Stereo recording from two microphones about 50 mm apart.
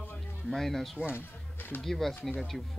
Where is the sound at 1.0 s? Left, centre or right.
Left.